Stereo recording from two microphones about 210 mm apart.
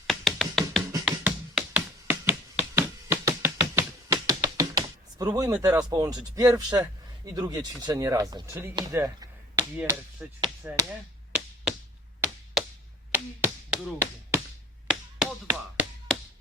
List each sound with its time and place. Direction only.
0.1 s tap: centre (ahead or behind); by 5.5 s 15° right (ahead or behind)
5.6 s speech: 15° right (ahead or behind)
10.2 s chop: 5° right (ahead or behind)
11.3 s tap: centre (ahead or behind)
13.1 s finger snapping: 10° right (ahead or behind)
14.8 s tap: 5° right (ahead or behind)